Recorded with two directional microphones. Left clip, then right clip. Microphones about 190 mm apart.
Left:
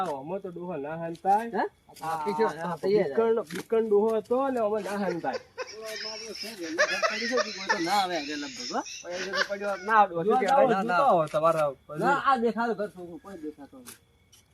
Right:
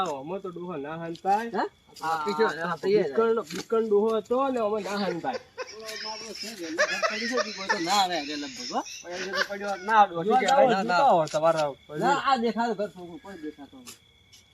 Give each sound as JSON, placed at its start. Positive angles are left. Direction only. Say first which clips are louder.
{"t": 0.0, "sound": "speech", "louder": "right 1 dB", "side_deg": 5}
{"t": 2.0, "sound": "speech", "louder": "right 2 dB", "side_deg": 25}
{"t": 3.2, "sound": "speech", "louder": "right 1 dB", "side_deg": 5}
{"t": 3.8, "sound": "speech", "louder": "even", "side_deg": 0}
{"t": 11.3, "sound": "speech", "louder": "even", "side_deg": 15}